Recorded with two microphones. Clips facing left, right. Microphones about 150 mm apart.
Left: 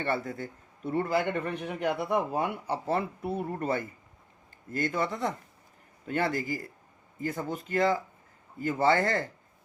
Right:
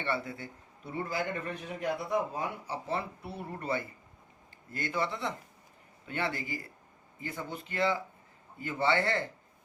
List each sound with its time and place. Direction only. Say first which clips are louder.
0.0 s a man's voice: left 4 dB; 45° left (ahead or behind)